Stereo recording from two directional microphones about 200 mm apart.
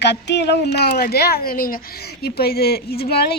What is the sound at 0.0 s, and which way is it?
A woman's voice, 60° left (ahead or behind).